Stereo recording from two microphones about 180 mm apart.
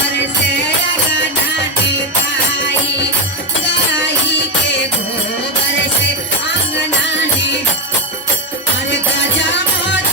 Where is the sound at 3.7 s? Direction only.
75° left (ahead or behind).